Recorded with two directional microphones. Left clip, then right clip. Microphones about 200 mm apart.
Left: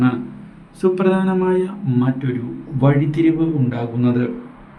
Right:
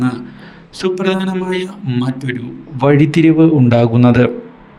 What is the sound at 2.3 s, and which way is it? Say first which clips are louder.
A man's voice: right 2 dB; 50° right (ahead or behind).